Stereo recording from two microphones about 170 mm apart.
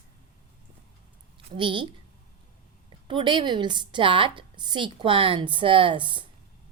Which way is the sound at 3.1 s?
30° right (ahead or behind).